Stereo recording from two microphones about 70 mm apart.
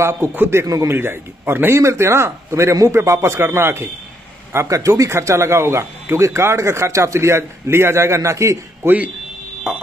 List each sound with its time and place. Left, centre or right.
0.0 s a man's voice: right
0.7 s speech: right
0.9 s a man's voice: right
4.6 s speech: right
8.8 s speech: right
9.7 s a sound: centre